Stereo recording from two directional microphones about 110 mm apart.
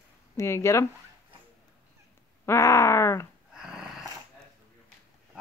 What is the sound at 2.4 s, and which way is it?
Speech, 25° left (ahead or behind).